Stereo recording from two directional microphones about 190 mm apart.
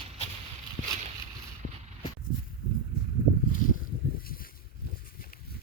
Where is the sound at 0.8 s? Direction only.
90° left.